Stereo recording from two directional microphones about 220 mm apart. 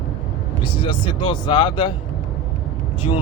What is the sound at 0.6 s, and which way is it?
Speech, 20° left (ahead or behind).